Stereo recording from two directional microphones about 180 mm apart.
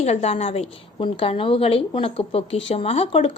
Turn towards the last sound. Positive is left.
turn(degrees=35)  # may be behind; listen again after turning